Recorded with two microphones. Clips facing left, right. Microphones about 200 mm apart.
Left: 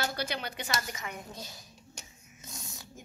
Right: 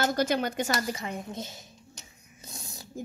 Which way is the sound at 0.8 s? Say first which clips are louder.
Right 7 dB; 30° right (ahead or behind).